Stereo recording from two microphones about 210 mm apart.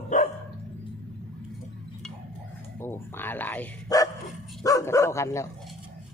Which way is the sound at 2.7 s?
10° left (ahead or behind).